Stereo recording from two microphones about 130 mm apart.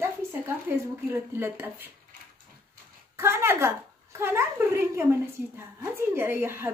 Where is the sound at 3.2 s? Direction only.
20° right (ahead or behind).